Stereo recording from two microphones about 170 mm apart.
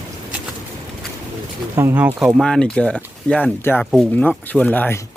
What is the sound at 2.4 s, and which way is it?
Speech, 5° left (ahead or behind).